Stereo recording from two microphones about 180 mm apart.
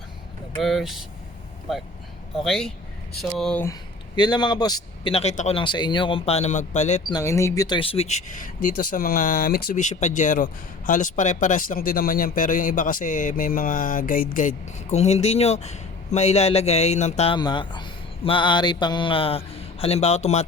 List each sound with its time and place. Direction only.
0.6 s speech: centre (ahead or behind)
2.3 s speech: centre (ahead or behind)
3.6 s a man's voice: 20° left (ahead or behind); by 5.5 s 40° left (ahead or behind)
5.5 s speech: 25° left (ahead or behind)
7.1 s speech: 15° left (ahead or behind); by 8.2 s 35° left (ahead or behind)
8.6 s speech: 50° left (ahead or behind)
17.3 s speech: 25° left (ahead or behind)